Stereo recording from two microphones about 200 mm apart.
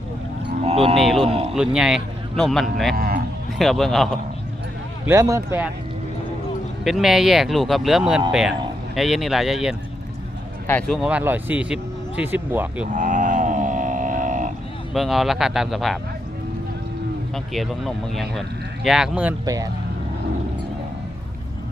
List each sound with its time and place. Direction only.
0.6 s cattle: 30° right (ahead or behind)
0.9 s a sound: centre (ahead or behind)
1.2 s a sound: 30° right (ahead or behind)
1.5 s speech: 5° right (ahead or behind)
2.9 s speech: 50° right (ahead or behind)
3.6 s speech: centre (ahead or behind)
5.0 s speech: 15° right (ahead or behind)
6.8 s speech: centre (ahead or behind)
12.9 s mantra: 40° right (ahead or behind)
14.9 s speech: centre (ahead or behind)
17.3 s speech: centre (ahead or behind)
19.5 s speech: 15° right (ahead or behind)